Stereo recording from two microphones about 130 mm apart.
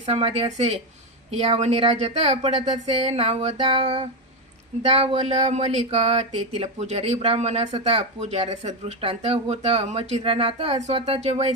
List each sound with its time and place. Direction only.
0.0 s speech: 50° right (ahead or behind)
4.8 s speech: 55° right (ahead or behind)